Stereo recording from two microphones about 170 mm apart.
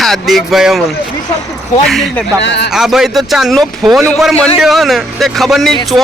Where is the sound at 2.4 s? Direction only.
90° left.